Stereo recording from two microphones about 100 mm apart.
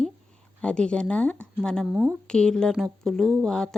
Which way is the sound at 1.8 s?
15° right (ahead or behind).